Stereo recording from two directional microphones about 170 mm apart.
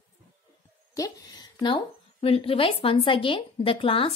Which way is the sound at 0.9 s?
25° left (ahead or behind).